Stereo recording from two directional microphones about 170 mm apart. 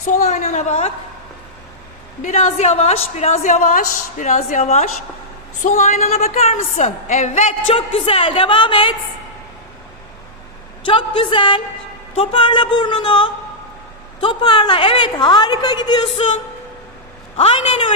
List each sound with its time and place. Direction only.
0.1 s a woman's voice: 45° left (ahead or behind)
2.2 s a woman's voice: 45° left (ahead or behind); by 9.0 s 30° left (ahead or behind)
10.8 s a woman's voice: 30° left (ahead or behind)
16.1 s a woman's voice: 45° left (ahead or behind)